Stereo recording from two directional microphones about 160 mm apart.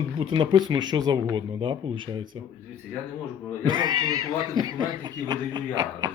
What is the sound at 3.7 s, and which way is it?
A man's voice, 30° right (ahead or behind).